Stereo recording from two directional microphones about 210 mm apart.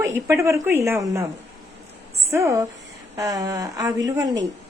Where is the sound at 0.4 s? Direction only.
10° right (ahead or behind).